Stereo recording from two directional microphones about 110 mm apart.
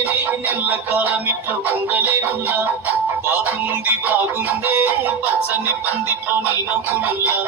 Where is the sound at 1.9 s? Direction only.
15° right (ahead or behind).